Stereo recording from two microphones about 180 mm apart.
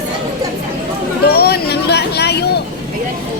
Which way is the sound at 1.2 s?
60° left (ahead or behind).